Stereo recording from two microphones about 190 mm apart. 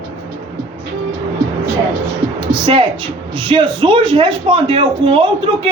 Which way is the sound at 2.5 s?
30° right (ahead or behind).